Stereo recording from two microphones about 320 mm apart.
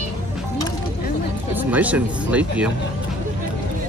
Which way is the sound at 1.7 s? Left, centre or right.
Centre.